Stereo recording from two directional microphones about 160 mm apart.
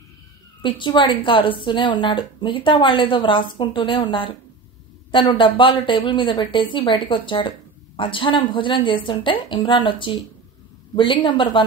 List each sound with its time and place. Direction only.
0.6 s a woman's voice: 30° left (ahead or behind)